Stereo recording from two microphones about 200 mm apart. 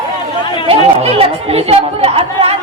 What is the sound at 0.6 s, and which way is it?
Chatter, 30° right (ahead or behind).